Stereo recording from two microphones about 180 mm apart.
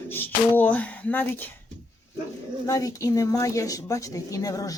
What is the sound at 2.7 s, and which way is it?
A woman's voice, 20° left (ahead or behind).